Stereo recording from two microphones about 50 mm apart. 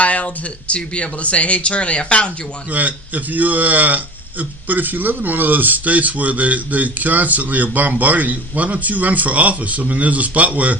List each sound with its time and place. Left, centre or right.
0.0 s a sound: left
0.7 s speech: left
2.7 s speech: right